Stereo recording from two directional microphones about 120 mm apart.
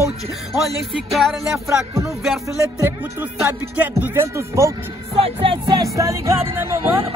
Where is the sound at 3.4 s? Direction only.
20° right (ahead or behind).